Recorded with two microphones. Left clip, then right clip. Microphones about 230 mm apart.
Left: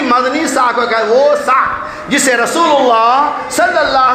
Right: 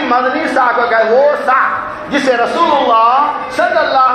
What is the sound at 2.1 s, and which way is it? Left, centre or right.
A man's voice, left.